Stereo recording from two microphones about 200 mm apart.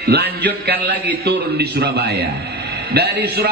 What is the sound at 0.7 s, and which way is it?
Speech, 10° right (ahead or behind).